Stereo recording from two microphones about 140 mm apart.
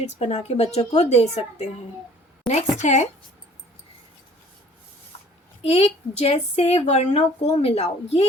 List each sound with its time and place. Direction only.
0.0 s speech: 50° left (ahead or behind)
2.7 s speech: 55° left (ahead or behind)
5.6 s speech: 50° left (ahead or behind)